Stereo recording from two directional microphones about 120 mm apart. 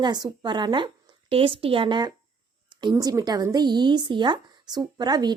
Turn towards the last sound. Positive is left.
turn(degrees=-35)  # may be behind; listen again after turning